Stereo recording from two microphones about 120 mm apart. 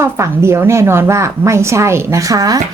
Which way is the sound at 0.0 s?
20° right (ahead or behind).